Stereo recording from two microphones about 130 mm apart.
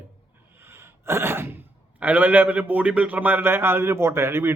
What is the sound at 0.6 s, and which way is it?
Sneeze, 20° right (ahead or behind).